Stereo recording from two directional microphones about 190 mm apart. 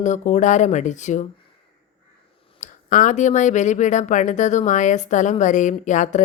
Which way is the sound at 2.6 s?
40° left (ahead or behind).